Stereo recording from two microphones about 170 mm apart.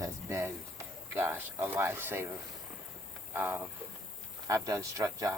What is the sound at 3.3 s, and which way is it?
Speech, 10° right (ahead or behind).